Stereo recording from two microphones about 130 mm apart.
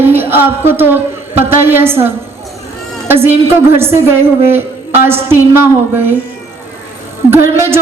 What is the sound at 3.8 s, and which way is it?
Speech, 20° right (ahead or behind).